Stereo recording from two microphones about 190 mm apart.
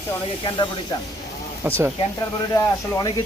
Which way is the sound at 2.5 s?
20° left (ahead or behind).